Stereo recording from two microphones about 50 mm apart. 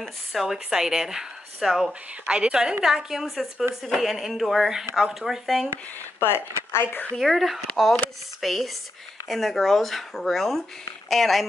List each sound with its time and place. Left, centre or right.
0.3 s speech: centre
5.7 s speech: left
7.2 s speech: centre